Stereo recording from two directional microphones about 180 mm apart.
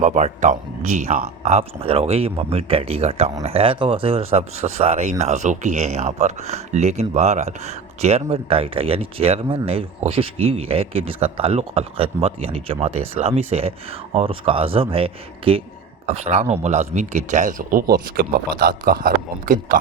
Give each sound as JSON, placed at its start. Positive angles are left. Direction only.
{"t": 0.0, "sound": "speech", "side_deg": -40}